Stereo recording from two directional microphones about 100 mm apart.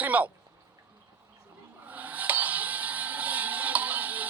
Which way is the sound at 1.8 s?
15° right (ahead or behind).